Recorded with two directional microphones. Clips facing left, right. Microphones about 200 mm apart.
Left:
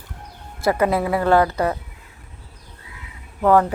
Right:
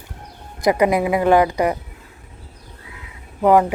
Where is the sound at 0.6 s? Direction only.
15° right (ahead or behind).